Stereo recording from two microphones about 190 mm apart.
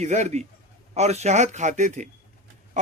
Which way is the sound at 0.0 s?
40° right (ahead or behind).